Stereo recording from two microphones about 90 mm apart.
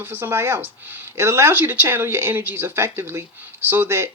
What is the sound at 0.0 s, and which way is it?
Speech, 25° right (ahead or behind).